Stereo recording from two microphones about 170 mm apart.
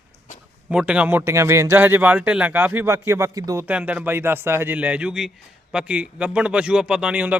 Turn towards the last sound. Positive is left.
turn(degrees=-10)  # may be behind; listen again after turning